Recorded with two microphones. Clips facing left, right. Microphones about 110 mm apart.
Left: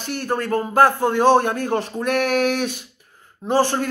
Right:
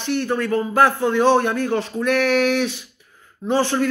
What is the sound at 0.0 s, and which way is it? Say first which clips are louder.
Speech: right 3 dB; 45° left (ahead or behind).